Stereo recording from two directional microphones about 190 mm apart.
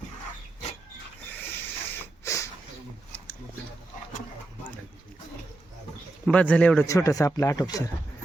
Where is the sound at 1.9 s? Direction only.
15° left (ahead or behind).